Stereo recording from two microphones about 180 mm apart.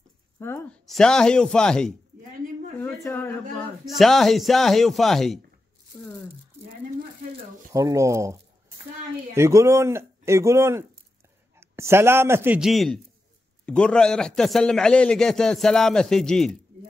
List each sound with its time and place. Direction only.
0.4 s a woman's voice: 15° left (ahead or behind)
2.8 s a sound: 15° left (ahead or behind)
3.8 s a man's voice: centre (ahead or behind)
7.7 s a man's voice: 20° right (ahead or behind); by 16.5 s centre (ahead or behind)